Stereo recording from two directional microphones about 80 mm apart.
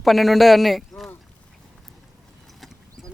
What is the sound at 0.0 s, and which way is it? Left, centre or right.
A man's voice, centre.